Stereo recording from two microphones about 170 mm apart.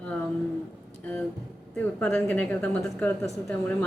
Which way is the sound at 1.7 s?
10° left (ahead or behind).